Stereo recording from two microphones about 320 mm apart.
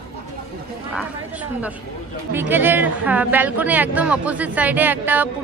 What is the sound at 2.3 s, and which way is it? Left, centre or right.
Speech, centre.